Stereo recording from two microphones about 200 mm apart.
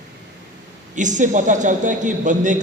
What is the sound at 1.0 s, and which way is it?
A man's voice, 40° right (ahead or behind).